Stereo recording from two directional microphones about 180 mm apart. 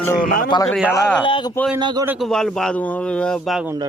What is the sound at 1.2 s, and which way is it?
Speech, 25° left (ahead or behind).